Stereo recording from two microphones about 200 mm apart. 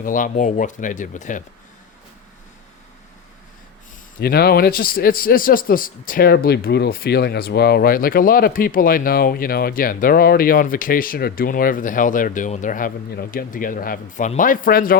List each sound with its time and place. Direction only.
0.0 s speech: 40° left (ahead or behind)
4.2 s a man's voice: 50° left (ahead or behind)